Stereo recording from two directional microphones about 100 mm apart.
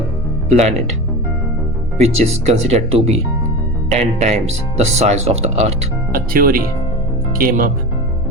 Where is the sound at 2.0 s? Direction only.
90° right.